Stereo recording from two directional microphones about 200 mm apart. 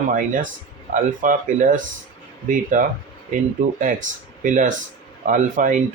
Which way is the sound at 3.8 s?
40° right (ahead or behind).